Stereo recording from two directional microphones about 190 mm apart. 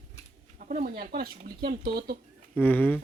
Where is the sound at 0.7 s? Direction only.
45° right (ahead or behind).